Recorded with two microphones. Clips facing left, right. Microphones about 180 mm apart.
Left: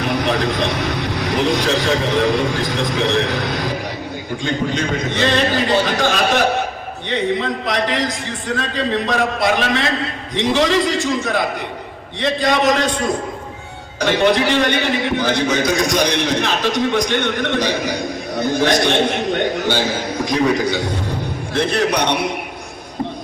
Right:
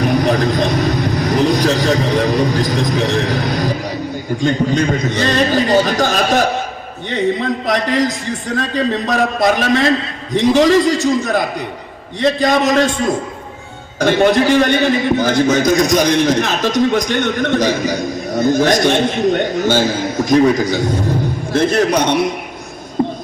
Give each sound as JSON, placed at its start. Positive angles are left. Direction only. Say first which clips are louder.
{"t": 0.0, "sound": "a man's voice", "louder": "right 4 dB", "side_deg": -45}
{"t": 14.0, "sound": "a man's voice", "louder": "right 3 dB", "side_deg": -45}